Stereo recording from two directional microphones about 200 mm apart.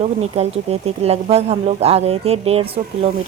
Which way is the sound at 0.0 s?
30° right (ahead or behind).